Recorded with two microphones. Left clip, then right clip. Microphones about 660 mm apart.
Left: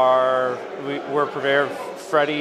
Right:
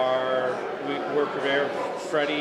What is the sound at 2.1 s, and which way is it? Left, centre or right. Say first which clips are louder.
Speech: left 7 dB; left.